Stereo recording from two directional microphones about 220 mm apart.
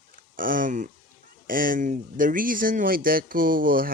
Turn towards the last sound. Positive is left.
turn(degrees=-40)  # may be behind; listen again after turning